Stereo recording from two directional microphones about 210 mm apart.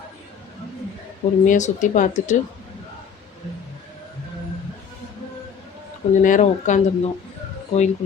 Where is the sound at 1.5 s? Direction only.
35° left (ahead or behind).